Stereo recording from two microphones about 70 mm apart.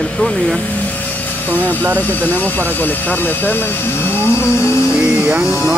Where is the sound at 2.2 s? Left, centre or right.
Left.